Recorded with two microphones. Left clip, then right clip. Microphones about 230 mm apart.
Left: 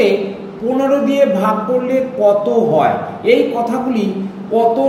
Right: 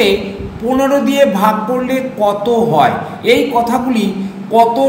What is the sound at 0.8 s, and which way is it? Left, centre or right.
A man's voice, centre.